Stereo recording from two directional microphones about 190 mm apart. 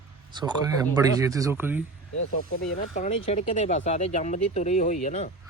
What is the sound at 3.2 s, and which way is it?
Speech, 35° left (ahead or behind).